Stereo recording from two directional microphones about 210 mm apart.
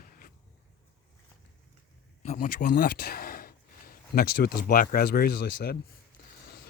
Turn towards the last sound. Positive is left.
turn(degrees=45)  # may be behind; listen again after turning